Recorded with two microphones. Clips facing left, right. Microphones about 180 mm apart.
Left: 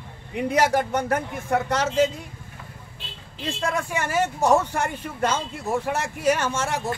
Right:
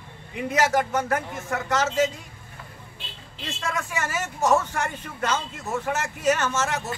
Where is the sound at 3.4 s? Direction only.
30° left (ahead or behind).